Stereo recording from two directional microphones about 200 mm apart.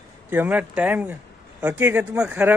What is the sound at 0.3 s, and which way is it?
Speech, 10° right (ahead or behind).